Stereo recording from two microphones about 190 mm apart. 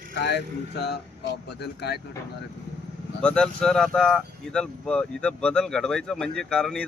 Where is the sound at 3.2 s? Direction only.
5° left (ahead or behind).